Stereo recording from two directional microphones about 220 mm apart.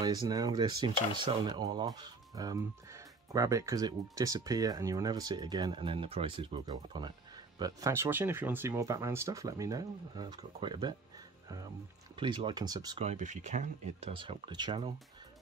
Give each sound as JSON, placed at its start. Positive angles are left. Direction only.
{"t": 0.0, "sound": "speech", "side_deg": -20}
{"t": 12.2, "sound": "speech", "side_deg": -20}
{"t": 13.0, "sound": "speech", "side_deg": -30}